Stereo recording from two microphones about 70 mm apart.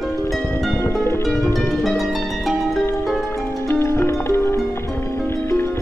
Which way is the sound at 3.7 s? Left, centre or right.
Left.